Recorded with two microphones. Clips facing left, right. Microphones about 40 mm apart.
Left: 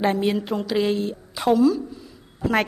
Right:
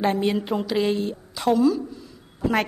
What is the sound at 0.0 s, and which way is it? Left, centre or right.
A woman's voice, centre.